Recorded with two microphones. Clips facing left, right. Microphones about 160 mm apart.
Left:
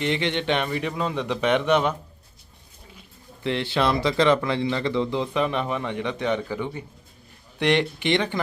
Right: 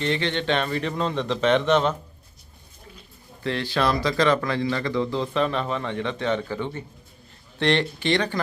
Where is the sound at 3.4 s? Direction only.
20° left (ahead or behind).